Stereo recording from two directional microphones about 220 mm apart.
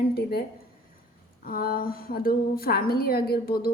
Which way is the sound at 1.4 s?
40° left (ahead or behind).